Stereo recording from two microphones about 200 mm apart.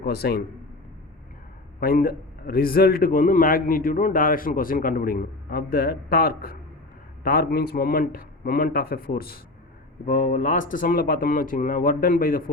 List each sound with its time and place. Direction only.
0.0 s a man's voice: 50° left (ahead or behind)
1.8 s a man's voice: 45° left (ahead or behind)